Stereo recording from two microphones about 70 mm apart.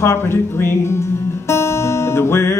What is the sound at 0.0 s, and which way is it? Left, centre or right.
Music, left.